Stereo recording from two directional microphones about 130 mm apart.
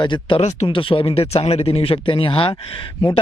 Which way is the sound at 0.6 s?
40° left (ahead or behind).